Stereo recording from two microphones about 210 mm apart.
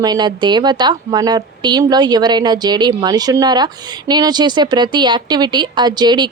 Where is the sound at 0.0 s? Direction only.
20° right (ahead or behind).